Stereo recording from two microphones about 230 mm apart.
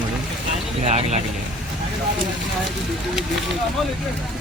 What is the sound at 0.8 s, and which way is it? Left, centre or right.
Speech, right.